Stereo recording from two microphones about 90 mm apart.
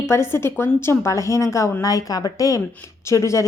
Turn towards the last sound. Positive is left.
turn(degrees=35)  # may be behind; listen again after turning